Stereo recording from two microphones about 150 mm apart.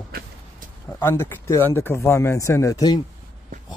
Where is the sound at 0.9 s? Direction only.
15° left (ahead or behind).